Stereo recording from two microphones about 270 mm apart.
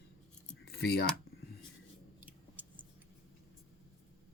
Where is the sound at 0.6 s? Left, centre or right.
Left.